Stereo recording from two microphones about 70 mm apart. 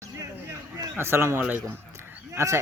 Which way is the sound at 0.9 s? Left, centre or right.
Right.